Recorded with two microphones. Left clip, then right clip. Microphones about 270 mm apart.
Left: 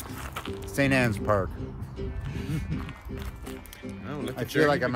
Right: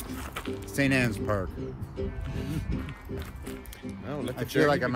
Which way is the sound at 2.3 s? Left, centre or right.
Centre.